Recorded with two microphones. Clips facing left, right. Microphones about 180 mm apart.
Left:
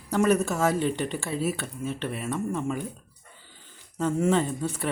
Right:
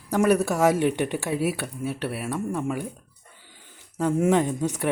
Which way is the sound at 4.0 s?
10° right (ahead or behind).